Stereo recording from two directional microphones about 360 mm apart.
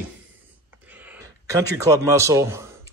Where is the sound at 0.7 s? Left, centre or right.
Centre.